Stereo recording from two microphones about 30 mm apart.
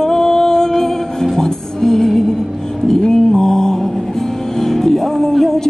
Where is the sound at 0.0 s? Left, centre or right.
Centre.